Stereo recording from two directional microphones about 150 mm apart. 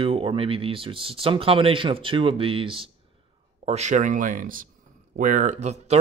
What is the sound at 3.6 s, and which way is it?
Speech, 50° right (ahead or behind).